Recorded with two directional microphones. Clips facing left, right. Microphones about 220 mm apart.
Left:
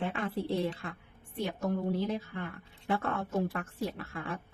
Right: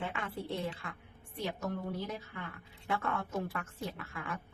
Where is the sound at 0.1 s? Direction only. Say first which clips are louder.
Left 6 dB; 35° left (ahead or behind).